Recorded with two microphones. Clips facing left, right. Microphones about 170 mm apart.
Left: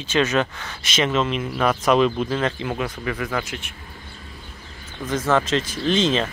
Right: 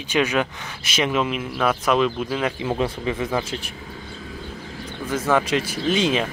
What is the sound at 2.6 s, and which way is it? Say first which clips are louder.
Speech: right 3 dB; 25° right (ahead or behind).